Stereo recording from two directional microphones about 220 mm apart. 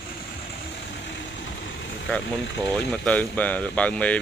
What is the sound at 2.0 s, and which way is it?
Speech, 5° left (ahead or behind).